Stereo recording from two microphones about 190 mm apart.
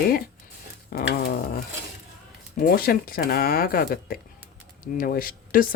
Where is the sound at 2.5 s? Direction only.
50° left (ahead or behind).